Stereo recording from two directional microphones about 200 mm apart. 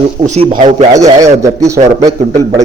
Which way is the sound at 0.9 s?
15° right (ahead or behind).